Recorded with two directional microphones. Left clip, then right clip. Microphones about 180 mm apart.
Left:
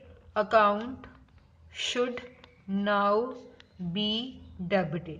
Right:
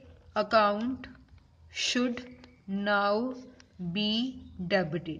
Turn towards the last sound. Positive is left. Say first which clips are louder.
# even
turn(degrees=-50)  # may be behind; listen again after turning